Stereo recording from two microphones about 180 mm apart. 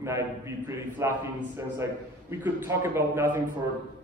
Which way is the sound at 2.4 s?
10° right (ahead or behind).